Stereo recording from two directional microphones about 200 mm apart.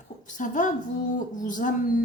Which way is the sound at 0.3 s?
40° left (ahead or behind).